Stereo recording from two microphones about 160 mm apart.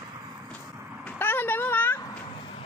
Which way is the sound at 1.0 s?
10° left (ahead or behind).